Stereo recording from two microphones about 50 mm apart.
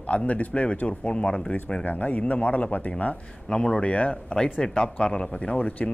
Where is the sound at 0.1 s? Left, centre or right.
Left.